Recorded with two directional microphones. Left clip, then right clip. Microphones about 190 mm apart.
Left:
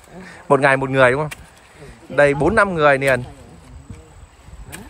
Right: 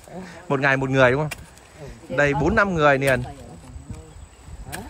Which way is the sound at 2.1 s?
10° right (ahead or behind).